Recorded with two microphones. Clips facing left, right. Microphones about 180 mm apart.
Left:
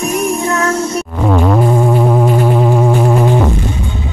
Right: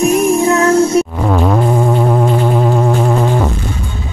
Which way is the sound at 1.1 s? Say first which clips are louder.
Left 1 dB; 5° right (ahead or behind).